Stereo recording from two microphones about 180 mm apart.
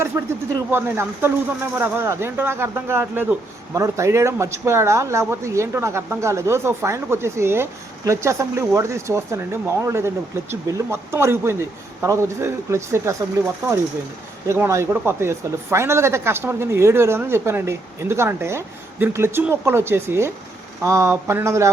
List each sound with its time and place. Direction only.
0.1 s speech: 15° right (ahead or behind)
14.4 s speech: 15° right (ahead or behind)